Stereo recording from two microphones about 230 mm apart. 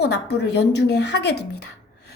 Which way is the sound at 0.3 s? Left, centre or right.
Left.